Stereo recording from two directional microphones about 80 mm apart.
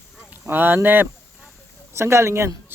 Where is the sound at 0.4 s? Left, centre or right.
Right.